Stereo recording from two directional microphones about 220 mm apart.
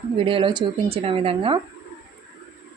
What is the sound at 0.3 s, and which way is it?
A woman's voice, 25° right (ahead or behind).